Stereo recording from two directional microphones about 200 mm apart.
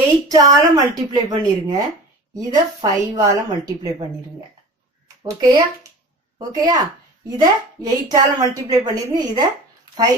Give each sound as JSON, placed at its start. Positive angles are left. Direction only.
{"t": 0.3, "sound": "a woman's voice", "side_deg": -20}
{"t": 5.2, "sound": "a woman's voice", "side_deg": -20}